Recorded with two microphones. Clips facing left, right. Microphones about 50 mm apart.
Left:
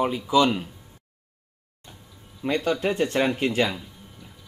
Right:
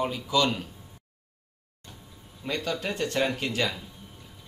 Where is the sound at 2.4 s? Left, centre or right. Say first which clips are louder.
Left 7 dB; left.